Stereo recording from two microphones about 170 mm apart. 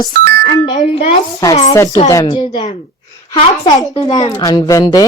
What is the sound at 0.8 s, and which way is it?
Speech, 35° left (ahead or behind).